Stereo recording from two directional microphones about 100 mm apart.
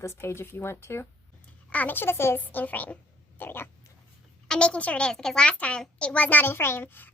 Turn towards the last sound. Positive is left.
turn(degrees=20)  # may be behind; listen again after turning